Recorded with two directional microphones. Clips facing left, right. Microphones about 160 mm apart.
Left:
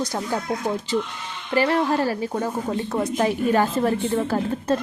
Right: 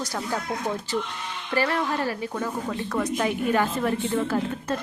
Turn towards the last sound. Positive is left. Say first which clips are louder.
# left 3 dB
turn(degrees=35)  # may be behind; listen again after turning